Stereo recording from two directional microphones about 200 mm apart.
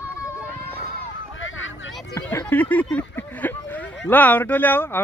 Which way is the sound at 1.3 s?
75° left (ahead or behind).